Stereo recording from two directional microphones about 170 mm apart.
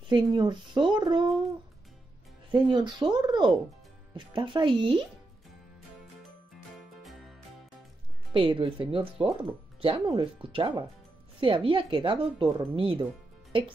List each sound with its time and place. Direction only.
0.1 s speech: 25° right (ahead or behind)
2.5 s speech: 25° right (ahead or behind)
7.0 s music: centre (ahead or behind)
8.3 s speech: 30° right (ahead or behind)